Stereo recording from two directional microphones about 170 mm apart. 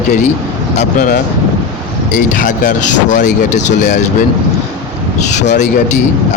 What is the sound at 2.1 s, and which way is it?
Speech, 50° left (ahead or behind).